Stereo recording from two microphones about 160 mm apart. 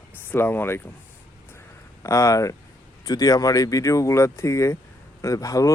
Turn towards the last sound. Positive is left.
turn(degrees=20)  # may be behind; listen again after turning